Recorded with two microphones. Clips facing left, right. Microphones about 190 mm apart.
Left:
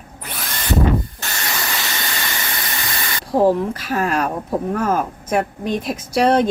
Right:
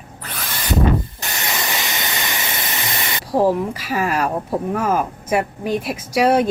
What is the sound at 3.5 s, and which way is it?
Speech, 5° right (ahead or behind).